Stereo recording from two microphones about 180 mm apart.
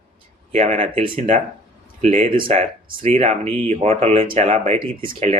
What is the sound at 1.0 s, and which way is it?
Speech, 30° right (ahead or behind).